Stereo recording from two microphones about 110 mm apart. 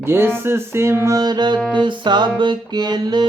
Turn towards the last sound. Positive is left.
turn(degrees=-40)  # may be behind; listen again after turning